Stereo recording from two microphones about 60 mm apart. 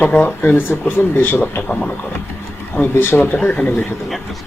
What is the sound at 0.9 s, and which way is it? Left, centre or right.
Speech, left.